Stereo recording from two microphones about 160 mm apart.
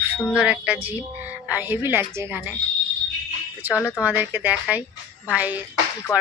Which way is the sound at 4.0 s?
10° right (ahead or behind).